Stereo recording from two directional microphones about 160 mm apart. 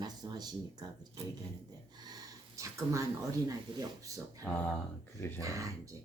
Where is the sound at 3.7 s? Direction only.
30° right (ahead or behind).